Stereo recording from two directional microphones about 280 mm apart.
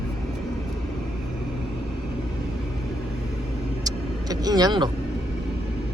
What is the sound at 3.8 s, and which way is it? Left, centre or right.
Vehicle, centre.